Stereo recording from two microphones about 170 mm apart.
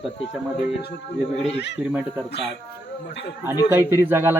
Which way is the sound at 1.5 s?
90° left.